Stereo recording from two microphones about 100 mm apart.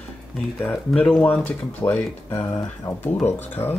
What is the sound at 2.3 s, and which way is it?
Speech, 30° left (ahead or behind).